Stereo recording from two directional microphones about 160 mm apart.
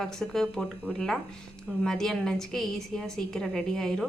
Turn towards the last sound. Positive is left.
turn(degrees=5)  # may be behind; listen again after turning